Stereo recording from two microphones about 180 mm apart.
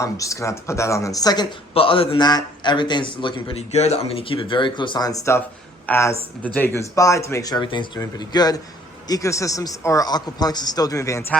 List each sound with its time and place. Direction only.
0.0 s speech: 15° left (ahead or behind)